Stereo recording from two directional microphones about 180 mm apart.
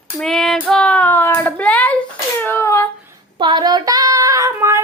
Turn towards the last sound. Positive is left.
turn(degrees=-15)  # may be behind; listen again after turning